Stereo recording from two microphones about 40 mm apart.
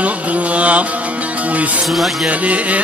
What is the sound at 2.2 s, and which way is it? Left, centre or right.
Music, right.